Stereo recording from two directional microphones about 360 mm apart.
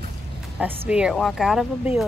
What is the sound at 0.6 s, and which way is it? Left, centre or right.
A child's voice, centre.